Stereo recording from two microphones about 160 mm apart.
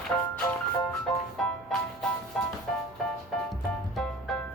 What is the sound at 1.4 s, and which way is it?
Music, 5° left (ahead or behind).